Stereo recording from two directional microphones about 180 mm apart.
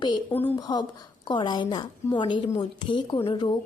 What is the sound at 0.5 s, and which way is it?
A woman's voice, 25° left (ahead or behind).